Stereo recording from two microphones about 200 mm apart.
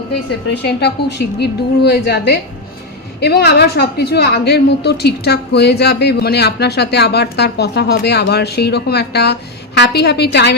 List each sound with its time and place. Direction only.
0.5 s a woman's voice: 55° left (ahead or behind)